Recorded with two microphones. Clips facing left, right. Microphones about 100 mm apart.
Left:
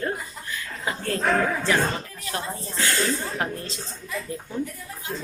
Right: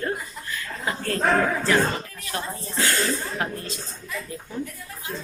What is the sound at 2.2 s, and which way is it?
A woman's voice, 25° left (ahead or behind).